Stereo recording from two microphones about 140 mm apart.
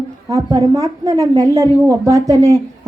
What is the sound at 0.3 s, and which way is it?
A woman's voice, 25° right (ahead or behind).